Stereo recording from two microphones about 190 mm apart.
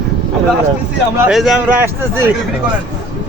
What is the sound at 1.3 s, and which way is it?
Speech, centre (ahead or behind).